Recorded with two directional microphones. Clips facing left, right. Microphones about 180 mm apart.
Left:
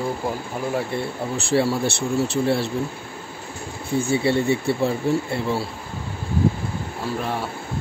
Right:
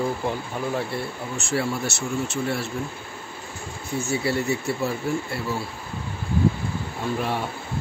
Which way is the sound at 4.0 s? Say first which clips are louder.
Left 5 dB; 30° left (ahead or behind).